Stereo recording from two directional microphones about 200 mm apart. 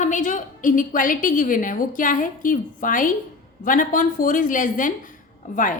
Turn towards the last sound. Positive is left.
turn(degrees=40)  # may be behind; listen again after turning